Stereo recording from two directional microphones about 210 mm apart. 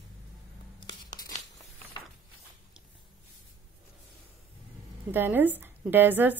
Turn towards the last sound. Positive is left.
turn(degrees=-10)  # may be behind; listen again after turning